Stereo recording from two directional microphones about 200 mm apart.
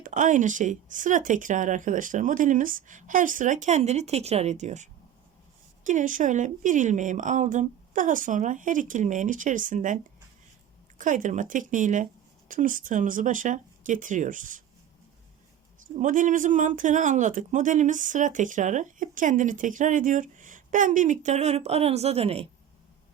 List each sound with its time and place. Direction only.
0.0 s speech: 40° right (ahead or behind)
15.8 s speech: 40° right (ahead or behind)